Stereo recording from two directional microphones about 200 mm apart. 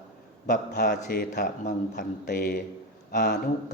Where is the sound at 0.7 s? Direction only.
55° left (ahead or behind).